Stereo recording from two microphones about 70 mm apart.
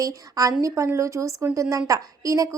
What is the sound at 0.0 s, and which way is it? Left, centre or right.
A woman's voice, right.